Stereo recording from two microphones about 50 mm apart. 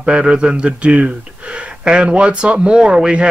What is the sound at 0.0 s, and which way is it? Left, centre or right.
Speech, right.